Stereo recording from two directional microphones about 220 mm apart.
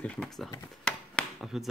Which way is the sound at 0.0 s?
5° left (ahead or behind).